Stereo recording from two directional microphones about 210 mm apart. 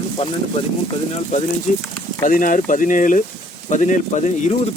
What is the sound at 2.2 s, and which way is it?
Speech, 40° left (ahead or behind).